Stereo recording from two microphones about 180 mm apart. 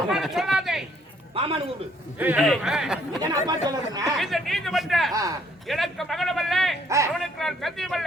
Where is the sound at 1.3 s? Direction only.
30° right (ahead or behind).